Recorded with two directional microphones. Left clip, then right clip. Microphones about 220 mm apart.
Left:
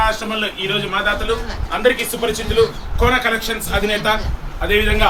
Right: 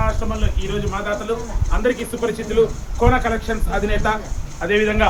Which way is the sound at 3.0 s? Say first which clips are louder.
Left 2 dB; 25° right (ahead or behind).